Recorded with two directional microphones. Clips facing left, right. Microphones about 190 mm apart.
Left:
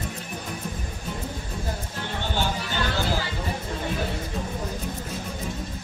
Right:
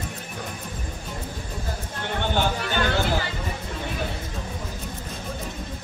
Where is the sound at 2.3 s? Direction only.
60° right (ahead or behind).